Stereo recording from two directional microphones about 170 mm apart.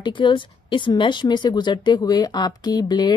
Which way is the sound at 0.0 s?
30° left (ahead or behind).